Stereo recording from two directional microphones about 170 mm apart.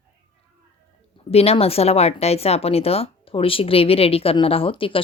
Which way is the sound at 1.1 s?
35° left (ahead or behind).